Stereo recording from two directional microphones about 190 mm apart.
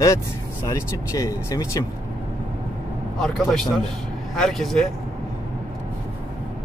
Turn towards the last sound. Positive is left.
turn(degrees=0)  # may be behind; listen again after turning